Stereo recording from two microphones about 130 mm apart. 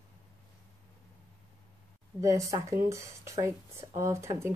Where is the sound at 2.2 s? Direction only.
25° right (ahead or behind).